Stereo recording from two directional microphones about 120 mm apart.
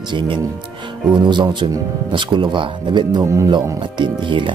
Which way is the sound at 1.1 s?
40° right (ahead or behind).